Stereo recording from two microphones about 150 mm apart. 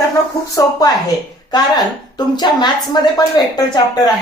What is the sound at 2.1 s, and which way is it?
A woman's voice, 30° left (ahead or behind).